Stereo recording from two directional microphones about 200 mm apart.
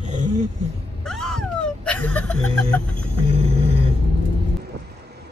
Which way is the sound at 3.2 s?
30° right (ahead or behind).